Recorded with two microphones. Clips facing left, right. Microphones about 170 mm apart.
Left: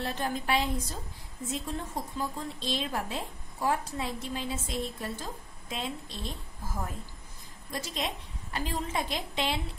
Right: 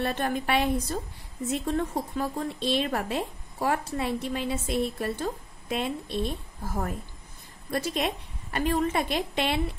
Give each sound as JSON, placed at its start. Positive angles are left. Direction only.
{"t": 0.0, "sound": "a woman's voice", "side_deg": -65}